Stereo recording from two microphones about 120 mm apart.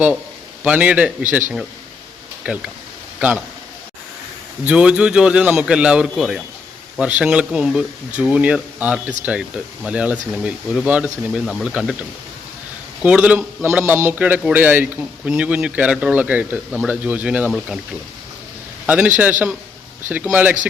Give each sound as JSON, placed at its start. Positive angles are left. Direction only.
{"t": 0.6, "sound": "a man's voice", "side_deg": -10}
{"t": 4.6, "sound": "speech", "side_deg": -10}
{"t": 18.9, "sound": "speech", "side_deg": -10}